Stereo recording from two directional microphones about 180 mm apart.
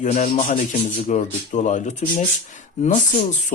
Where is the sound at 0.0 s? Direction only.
45° left (ahead or behind).